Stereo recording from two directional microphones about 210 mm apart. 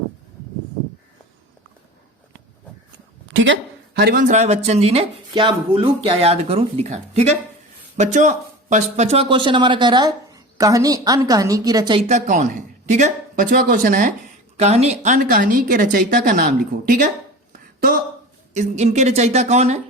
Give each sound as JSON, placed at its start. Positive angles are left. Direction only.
{"t": 3.2, "sound": "speech", "side_deg": -65}
{"t": 9.1, "sound": "a woman's voice", "side_deg": -25}